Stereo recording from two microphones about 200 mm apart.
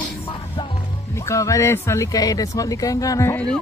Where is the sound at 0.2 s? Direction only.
30° left (ahead or behind).